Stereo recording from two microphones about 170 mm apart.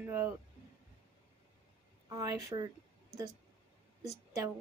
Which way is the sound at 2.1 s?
20° right (ahead or behind).